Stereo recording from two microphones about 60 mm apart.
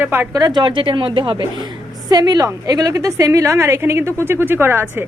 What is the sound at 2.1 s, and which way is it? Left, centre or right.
A woman's voice, right.